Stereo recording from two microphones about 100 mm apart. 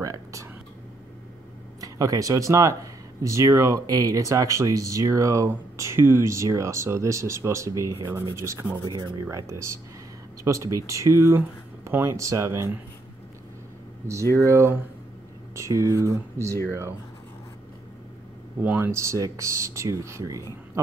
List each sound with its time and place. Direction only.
0.0 s a sound: 35° right (ahead or behind)
1.8 s speech: 35° right (ahead or behind)
8.8 s speech: 35° right (ahead or behind)
10.4 s speech: 30° right (ahead or behind)
14.4 s speech: 30° right (ahead or behind)
18.6 s speech: 20° right (ahead or behind)